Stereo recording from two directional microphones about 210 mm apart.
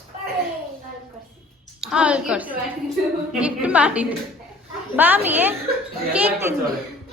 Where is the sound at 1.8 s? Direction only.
5° right (ahead or behind).